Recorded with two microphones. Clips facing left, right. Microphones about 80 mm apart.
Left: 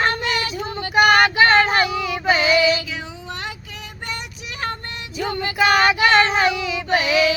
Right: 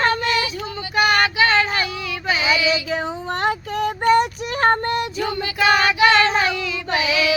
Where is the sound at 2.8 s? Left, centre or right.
Right.